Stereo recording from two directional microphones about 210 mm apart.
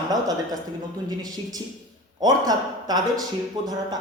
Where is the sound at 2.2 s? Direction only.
20° right (ahead or behind).